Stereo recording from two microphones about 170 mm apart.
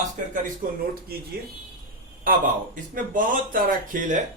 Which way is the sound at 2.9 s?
55° right (ahead or behind).